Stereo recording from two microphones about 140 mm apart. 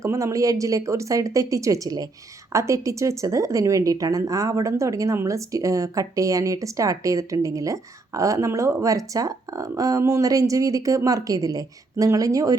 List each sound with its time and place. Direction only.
0.0 s speech: 20° right (ahead or behind)